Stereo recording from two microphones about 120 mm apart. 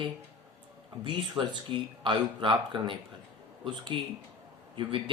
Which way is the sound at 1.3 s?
40° right (ahead or behind).